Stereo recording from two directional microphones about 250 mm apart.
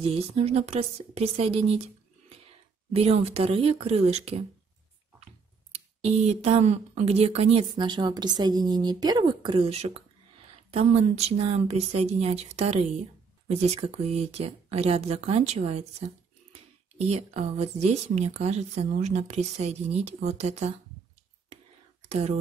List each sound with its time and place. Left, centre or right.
0.0 s speech: right
2.9 s speech: right
6.2 s speech: right
17.1 s speech: right
22.0 s speech: right